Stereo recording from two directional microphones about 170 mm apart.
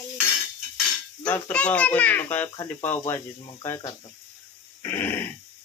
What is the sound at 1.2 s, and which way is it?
A child's voice, 5° left (ahead or behind).